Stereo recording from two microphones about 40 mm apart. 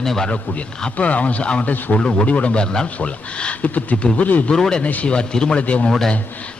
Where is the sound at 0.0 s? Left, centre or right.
Centre.